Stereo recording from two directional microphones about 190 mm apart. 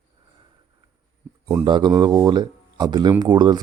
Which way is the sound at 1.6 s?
25° right (ahead or behind).